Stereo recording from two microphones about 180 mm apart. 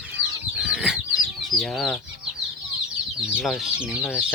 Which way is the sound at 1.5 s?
Centre (ahead or behind).